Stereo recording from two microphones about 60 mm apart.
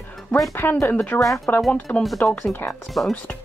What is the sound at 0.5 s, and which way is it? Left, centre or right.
Speech, left.